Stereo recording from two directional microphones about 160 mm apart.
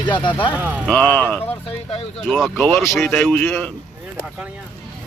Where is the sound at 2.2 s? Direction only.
Centre (ahead or behind).